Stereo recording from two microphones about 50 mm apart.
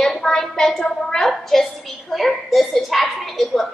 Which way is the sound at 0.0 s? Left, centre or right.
Centre.